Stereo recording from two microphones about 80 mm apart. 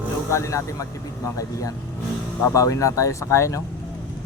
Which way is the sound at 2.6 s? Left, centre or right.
Left.